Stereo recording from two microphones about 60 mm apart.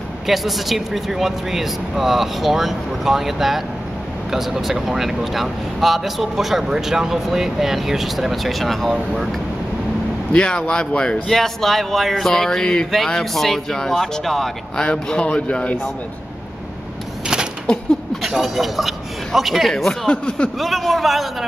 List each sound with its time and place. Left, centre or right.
0.3 s speech: centre
10.3 s a man's voice: centre
11.2 s speech: centre
14.8 s a man's voice: centre
18.2 s a man's voice: centre
20.5 s speech: centre